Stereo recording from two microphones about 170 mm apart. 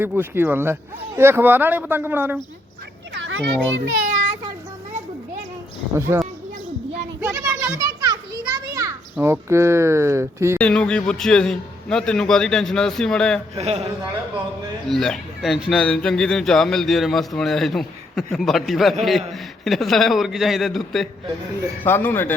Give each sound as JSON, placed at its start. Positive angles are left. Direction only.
{"t": 0.0, "sound": "speech", "side_deg": -10}
{"t": 3.2, "sound": "a child's voice", "side_deg": -90}
{"t": 6.1, "sound": "a child's voice", "side_deg": -15}
{"t": 7.8, "sound": "children playing", "side_deg": -25}
{"t": 9.1, "sound": "speech", "side_deg": -15}
{"t": 10.6, "sound": "speech", "side_deg": 5}
{"t": 13.6, "sound": "a man's voice", "side_deg": -35}
{"t": 14.8, "sound": "speech", "side_deg": 0}
{"t": 21.8, "sound": "speech", "side_deg": 10}